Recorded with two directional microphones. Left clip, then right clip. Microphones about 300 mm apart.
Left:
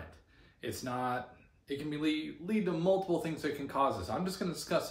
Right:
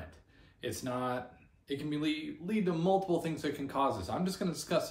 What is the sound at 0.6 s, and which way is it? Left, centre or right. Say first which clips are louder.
Speech: even; centre.